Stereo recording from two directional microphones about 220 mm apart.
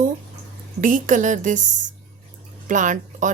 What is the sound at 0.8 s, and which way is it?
A woman's voice, 35° right (ahead or behind).